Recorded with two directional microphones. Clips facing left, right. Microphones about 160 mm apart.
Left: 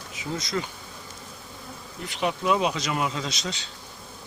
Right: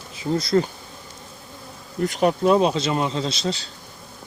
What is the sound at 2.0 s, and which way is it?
Speech, 45° right (ahead or behind).